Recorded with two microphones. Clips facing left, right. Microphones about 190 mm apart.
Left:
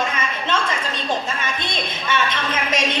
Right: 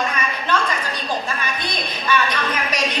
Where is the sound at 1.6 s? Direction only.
25° left (ahead or behind).